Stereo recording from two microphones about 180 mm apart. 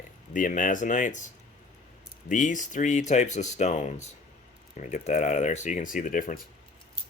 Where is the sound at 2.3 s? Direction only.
45° left (ahead or behind).